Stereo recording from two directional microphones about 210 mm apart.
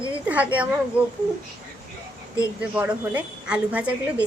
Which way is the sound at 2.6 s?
5° right (ahead or behind).